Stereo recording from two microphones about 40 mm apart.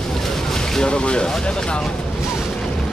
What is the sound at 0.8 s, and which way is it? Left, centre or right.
Speech, left.